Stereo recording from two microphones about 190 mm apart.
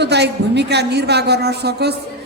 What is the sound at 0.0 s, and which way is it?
A woman's voice, 65° right (ahead or behind).